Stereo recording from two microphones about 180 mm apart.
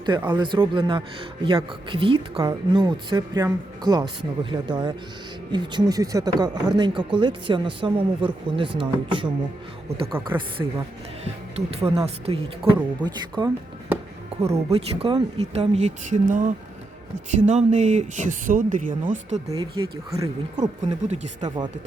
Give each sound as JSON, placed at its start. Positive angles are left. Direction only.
{"t": 0.0, "sound": "speech", "side_deg": -25}
{"t": 14.7, "sound": "speech", "side_deg": -35}
{"t": 19.5, "sound": "speech", "side_deg": -20}
{"t": 20.6, "sound": "speech", "side_deg": -40}
{"t": 21.4, "sound": "speech", "side_deg": -25}